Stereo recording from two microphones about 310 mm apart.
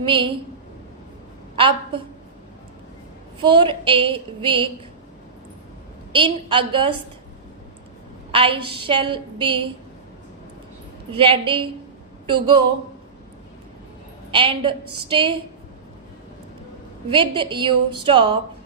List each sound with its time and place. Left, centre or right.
0.0 s a woman's voice: centre
1.5 s a woman's voice: centre
3.4 s a woman's voice: centre
6.1 s a woman's voice: centre
8.3 s a woman's voice: centre
11.1 s a woman's voice: centre
14.3 s a woman's voice: centre
17.1 s a woman's voice: centre